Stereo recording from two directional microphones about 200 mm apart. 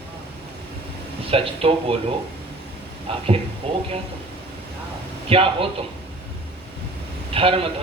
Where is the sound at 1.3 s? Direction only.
30° right (ahead or behind).